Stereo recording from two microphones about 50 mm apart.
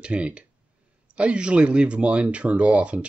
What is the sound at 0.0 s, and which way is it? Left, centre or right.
Speech, right.